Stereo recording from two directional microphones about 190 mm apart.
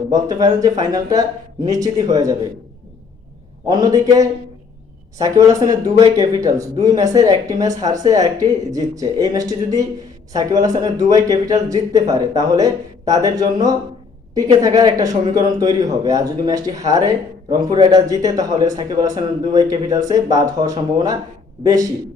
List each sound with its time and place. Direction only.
0.1 s speech: 20° right (ahead or behind)
3.7 s speech: 20° right (ahead or behind)